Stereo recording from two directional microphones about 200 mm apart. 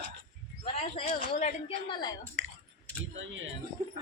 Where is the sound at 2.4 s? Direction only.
65° right (ahead or behind).